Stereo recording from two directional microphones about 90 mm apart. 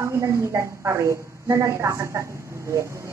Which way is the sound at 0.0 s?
35° right (ahead or behind).